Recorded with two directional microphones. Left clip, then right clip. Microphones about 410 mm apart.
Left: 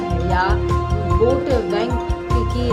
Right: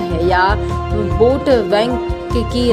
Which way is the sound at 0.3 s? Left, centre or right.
Centre.